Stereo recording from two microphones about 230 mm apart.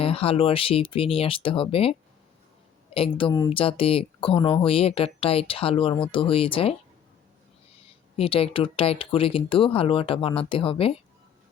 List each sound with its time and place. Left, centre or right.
0.0 s speech: left
8.1 s speech: left